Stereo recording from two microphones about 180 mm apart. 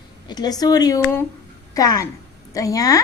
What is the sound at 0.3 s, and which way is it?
A woman's voice, 20° left (ahead or behind).